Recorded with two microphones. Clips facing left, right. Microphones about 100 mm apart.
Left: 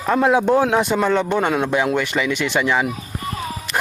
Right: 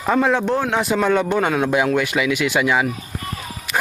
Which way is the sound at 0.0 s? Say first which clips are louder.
Left 1 dB; centre (ahead or behind).